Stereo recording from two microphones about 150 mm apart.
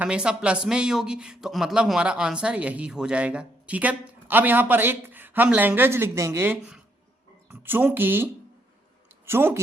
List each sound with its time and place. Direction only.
0.0 s speech: 5° right (ahead or behind)